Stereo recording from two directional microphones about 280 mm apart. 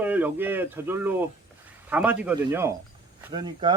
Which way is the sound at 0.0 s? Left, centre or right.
Centre.